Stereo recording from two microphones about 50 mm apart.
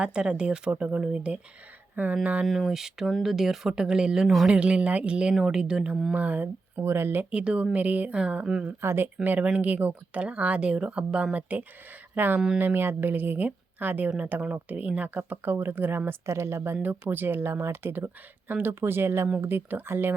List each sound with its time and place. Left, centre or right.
0.0 s speech: centre
2.5 s speech: centre
6.1 s speech: right
6.8 s speech: right
7.3 s speech: right
8.1 s speech: centre
8.8 s speech: right
9.4 s speech: right
17.1 s speech: right
18.7 s speech: right